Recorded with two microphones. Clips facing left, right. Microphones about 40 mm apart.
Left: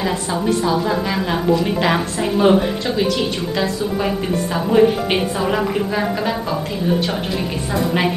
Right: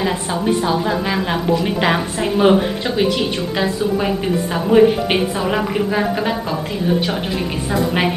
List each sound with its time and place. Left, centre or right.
1.1 s a woman's voice: centre